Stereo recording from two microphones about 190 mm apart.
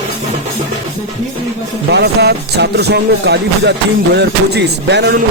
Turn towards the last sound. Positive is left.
turn(degrees=-65)  # may be behind; listen again after turning